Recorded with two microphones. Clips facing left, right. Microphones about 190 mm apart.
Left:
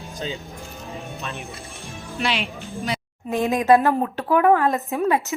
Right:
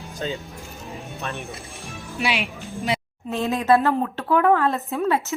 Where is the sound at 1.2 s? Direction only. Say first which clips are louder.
Right 5 dB; 55° right (ahead or behind).